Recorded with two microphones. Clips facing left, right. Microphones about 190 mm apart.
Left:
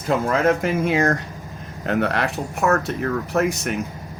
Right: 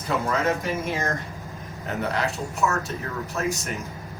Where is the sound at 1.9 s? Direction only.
70° left (ahead or behind).